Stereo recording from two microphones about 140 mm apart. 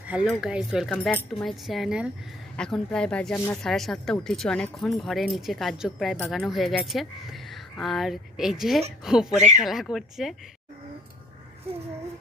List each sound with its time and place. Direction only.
0.0 s speech: 10° right (ahead or behind)
6.1 s speech: 10° left (ahead or behind)
6.4 s speech: centre (ahead or behind)